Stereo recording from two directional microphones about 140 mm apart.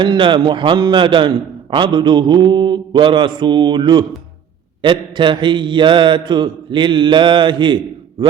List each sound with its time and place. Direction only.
0.0 s mantra: 35° right (ahead or behind)